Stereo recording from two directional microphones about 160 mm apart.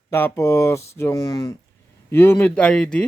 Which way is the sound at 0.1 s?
15° left (ahead or behind).